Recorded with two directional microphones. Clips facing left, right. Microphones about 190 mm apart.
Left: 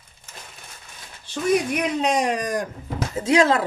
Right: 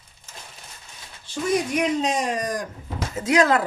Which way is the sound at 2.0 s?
65° left (ahead or behind).